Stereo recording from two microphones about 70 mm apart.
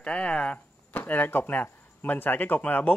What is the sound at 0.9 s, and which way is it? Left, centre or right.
Speech, left.